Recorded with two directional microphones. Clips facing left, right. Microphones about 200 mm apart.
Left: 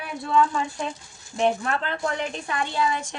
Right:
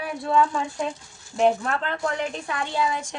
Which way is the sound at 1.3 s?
Centre (ahead or behind).